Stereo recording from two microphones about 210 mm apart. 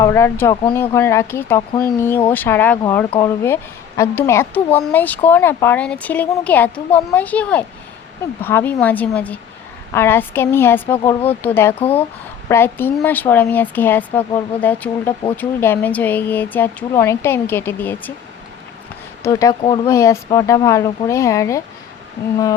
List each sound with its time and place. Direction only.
0.0 s speech: 15° left (ahead or behind)
11.7 s speech: 25° left (ahead or behind)
12.5 s speech: 10° left (ahead or behind)
19.2 s speech: 15° left (ahead or behind)